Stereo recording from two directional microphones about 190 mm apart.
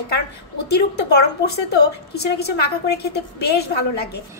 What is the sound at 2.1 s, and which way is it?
A woman's voice, 60° left (ahead or behind).